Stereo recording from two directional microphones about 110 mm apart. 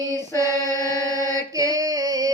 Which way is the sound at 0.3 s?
30° right (ahead or behind).